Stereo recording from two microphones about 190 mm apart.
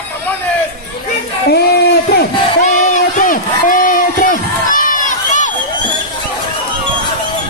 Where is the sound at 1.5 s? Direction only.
60° left (ahead or behind).